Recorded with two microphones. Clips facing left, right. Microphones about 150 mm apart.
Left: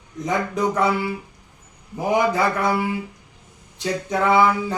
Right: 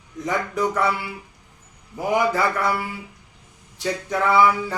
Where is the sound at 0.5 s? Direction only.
20° left (ahead or behind).